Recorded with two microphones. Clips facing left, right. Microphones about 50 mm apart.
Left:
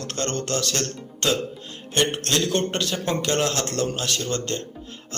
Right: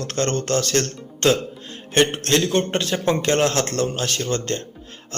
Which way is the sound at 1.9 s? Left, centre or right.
Right.